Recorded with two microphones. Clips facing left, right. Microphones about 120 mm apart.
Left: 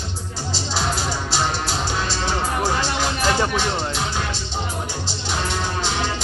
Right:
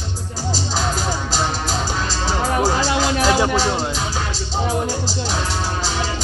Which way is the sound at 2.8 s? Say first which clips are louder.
Right 4 dB; 90° right.